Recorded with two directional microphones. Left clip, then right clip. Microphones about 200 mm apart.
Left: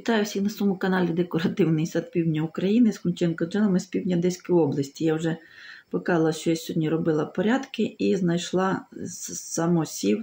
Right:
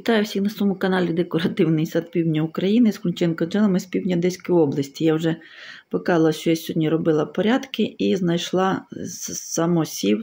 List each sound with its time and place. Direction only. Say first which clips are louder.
0.0 s speech: right 4 dB; 25° right (ahead or behind)